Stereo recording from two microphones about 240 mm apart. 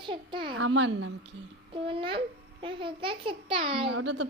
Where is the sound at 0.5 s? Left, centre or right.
Right.